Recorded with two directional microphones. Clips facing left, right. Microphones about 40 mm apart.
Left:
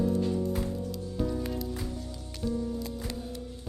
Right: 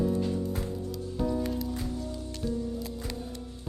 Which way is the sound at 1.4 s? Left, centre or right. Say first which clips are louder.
Right 2 dB; centre.